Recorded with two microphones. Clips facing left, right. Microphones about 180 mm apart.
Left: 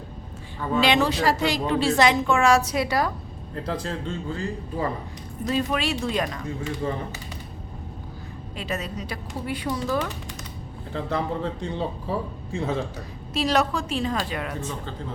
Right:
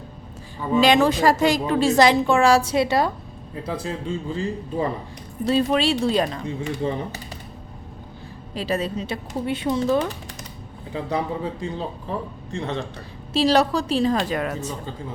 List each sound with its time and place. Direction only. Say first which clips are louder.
0.8 s a woman's voice: right 4 dB; 45° right (ahead or behind); by 3.1 s 25° right (ahead or behind)
3.5 s a man's voice: right 1 dB; 10° right (ahead or behind)
5.5 s speech: right 5 dB; 30° right (ahead or behind)
8.5 s speech: right 6 dB; 35° right (ahead or behind)
10.9 s a man's voice: right 1 dB; 10° right (ahead or behind)
13.3 s a woman's voice: right 5 dB; 30° right (ahead or behind)